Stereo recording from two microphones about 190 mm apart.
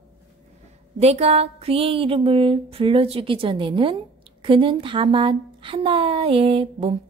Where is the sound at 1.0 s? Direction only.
35° right (ahead or behind).